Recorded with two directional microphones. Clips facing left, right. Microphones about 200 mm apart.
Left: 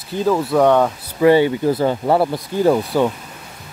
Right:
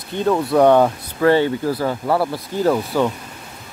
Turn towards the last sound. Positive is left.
turn(degrees=15)  # may be behind; listen again after turning